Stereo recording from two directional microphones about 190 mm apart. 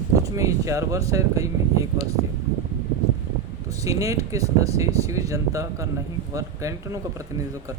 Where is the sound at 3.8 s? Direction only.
15° right (ahead or behind).